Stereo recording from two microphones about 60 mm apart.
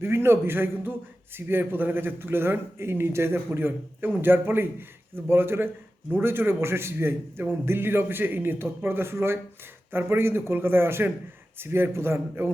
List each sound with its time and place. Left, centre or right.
0.0 s a man's voice: right
3.3 s a man's voice: right